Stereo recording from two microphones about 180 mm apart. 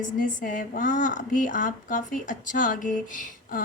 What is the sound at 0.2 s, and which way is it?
A woman's voice, 45° left (ahead or behind).